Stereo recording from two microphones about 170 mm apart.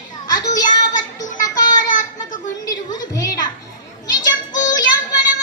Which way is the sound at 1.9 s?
50° left (ahead or behind).